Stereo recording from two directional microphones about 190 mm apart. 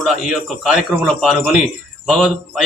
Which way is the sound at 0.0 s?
Centre (ahead or behind).